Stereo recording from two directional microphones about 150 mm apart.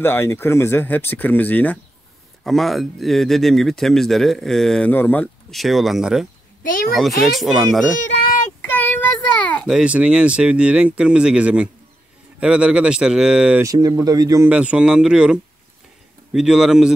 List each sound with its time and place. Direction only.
0.0 s speech: 15° left (ahead or behind)
5.5 s speech: centre (ahead or behind)
8.0 s a sound: 55° left (ahead or behind)
8.6 s child singing: 10° left (ahead or behind)
9.7 s speech: 5° right (ahead or behind)
13.6 s speech: 25° right (ahead or behind)
14.5 s speech: 5° right (ahead or behind)